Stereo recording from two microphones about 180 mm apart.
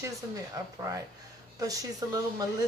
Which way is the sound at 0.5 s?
20° right (ahead or behind).